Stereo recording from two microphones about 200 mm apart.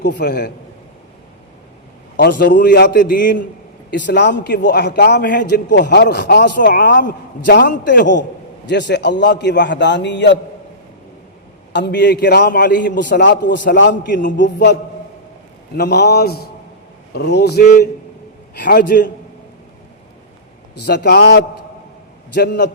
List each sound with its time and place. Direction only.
0.0 s a man's voice: 55° left (ahead or behind)
2.1 s a man's voice: 45° left (ahead or behind)
3.9 s a man's voice: 60° left (ahead or behind); by 7.1 s 45° left (ahead or behind)
7.4 s a man's voice: 60° left (ahead or behind)
11.7 s a man's voice: 60° left (ahead or behind)
15.8 s a man's voice: 55° left (ahead or behind)
20.8 s a man's voice: 55° left (ahead or behind)